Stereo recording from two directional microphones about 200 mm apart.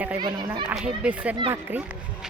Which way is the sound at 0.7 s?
5° right (ahead or behind).